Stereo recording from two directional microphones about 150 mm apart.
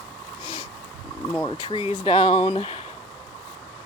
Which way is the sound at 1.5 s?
35° left (ahead or behind).